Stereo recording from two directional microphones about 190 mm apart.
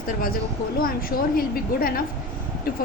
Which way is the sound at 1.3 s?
50° left (ahead or behind).